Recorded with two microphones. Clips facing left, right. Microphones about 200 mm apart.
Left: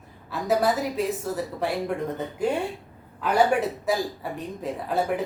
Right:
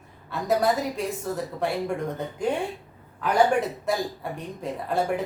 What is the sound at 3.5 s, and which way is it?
A man's voice, 5° left (ahead or behind).